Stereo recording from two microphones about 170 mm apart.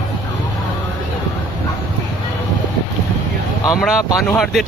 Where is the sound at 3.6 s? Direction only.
5° right (ahead or behind).